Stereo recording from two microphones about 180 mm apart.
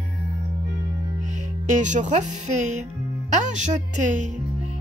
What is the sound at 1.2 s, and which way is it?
A child's voice, 40° right (ahead or behind).